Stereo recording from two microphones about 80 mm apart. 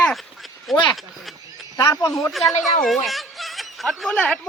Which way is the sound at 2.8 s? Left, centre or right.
Centre.